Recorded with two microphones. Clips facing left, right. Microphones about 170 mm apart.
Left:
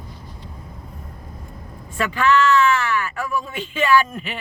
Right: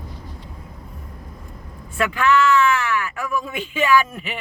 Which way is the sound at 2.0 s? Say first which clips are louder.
Even; 10° right (ahead or behind).